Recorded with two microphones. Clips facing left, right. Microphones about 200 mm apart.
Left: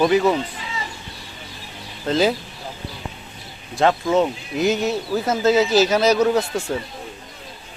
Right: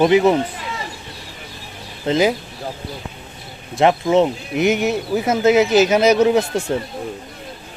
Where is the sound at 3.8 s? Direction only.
20° right (ahead or behind).